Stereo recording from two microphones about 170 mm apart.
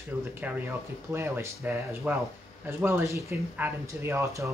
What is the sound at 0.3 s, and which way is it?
Speech, 10° right (ahead or behind).